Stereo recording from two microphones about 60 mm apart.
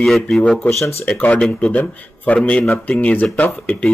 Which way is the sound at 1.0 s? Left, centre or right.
Left.